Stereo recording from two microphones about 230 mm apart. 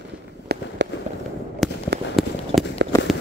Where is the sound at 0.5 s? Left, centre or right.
Right.